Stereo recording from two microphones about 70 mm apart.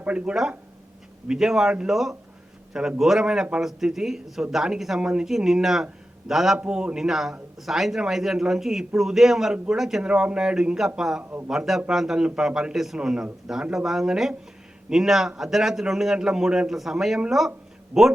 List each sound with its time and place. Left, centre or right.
0.0 s a man's voice: centre
1.3 s a man's voice: centre
11.2 s a man's voice: right
11.4 s a man's voice: centre